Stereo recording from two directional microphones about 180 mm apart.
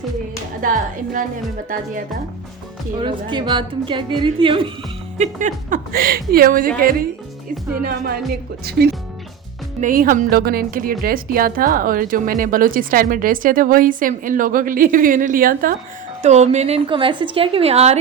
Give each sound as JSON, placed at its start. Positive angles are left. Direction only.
{"t": 0.6, "sound": "a woman's voice", "side_deg": -50}
{"t": 3.0, "sound": "a woman's voice", "side_deg": -25}
{"t": 5.1, "sound": "a woman's voice", "side_deg": -40}
{"t": 7.9, "sound": "a woman's voice", "side_deg": -55}
{"t": 9.8, "sound": "a woman's voice", "side_deg": -50}
{"t": 16.2, "sound": "a woman's voice", "side_deg": -40}